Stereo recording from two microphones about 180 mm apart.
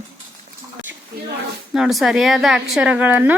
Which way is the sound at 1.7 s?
Centre (ahead or behind).